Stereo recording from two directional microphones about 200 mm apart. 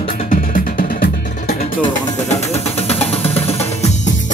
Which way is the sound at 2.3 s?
35° left (ahead or behind).